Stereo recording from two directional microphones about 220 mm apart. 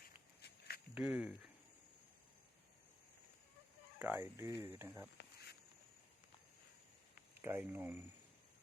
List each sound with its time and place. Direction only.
0.0 s walk: 45° left (ahead or behind)
0.9 s speech: 5° right (ahead or behind)
3.9 s speech: 10° right (ahead or behind)
7.4 s speech: 10° right (ahead or behind)